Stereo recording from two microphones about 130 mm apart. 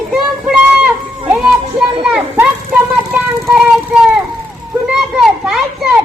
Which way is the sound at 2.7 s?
10° right (ahead or behind).